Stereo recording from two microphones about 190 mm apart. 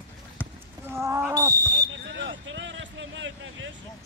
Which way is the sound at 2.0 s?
70° right (ahead or behind).